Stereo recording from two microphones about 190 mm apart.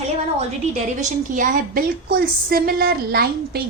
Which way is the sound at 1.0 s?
40° right (ahead or behind).